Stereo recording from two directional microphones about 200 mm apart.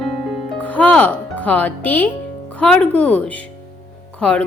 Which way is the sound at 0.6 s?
5° left (ahead or behind).